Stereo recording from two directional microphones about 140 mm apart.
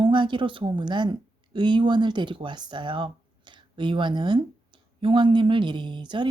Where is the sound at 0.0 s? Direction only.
35° right (ahead or behind).